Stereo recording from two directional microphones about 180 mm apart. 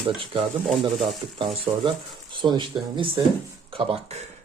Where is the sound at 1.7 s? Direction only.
25° right (ahead or behind).